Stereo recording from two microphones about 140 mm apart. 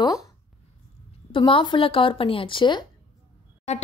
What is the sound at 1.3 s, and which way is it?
Speech, 40° left (ahead or behind).